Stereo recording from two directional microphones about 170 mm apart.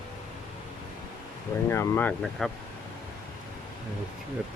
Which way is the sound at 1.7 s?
15° left (ahead or behind).